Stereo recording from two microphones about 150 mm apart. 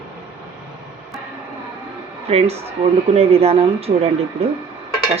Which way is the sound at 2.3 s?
45° right (ahead or behind).